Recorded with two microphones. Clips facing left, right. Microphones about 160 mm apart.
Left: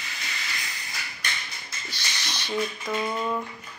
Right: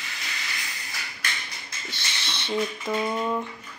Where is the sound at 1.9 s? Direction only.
25° right (ahead or behind).